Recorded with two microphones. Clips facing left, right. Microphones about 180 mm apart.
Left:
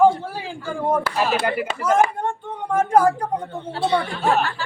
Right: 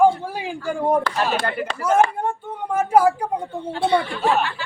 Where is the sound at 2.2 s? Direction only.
10° right (ahead or behind).